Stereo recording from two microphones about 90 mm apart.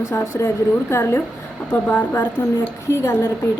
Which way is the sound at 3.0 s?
35° left (ahead or behind).